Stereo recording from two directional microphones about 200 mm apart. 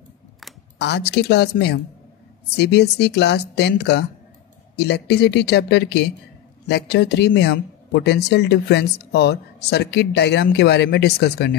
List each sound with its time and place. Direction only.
0.7 s a man's voice: 55° left (ahead or behind)